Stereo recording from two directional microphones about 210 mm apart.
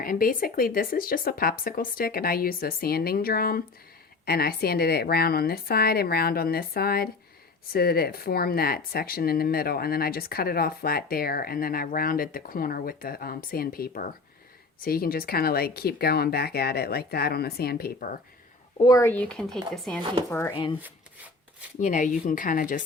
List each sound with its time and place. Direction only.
0.0 s speech: 45° left (ahead or behind)
18.8 s speech: 15° left (ahead or behind)
20.5 s speech: 20° left (ahead or behind)
21.8 s speech: 35° left (ahead or behind)